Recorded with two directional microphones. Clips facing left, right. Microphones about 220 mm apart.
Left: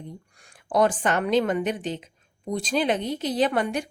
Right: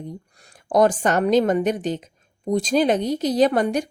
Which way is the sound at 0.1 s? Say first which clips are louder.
Right 6 dB; 40° right (ahead or behind).